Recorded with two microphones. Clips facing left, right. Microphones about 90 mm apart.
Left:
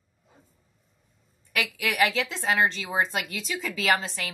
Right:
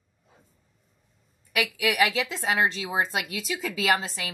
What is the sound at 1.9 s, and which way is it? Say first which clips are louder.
A woman's voice: left 1 dB; 10° right (ahead or behind).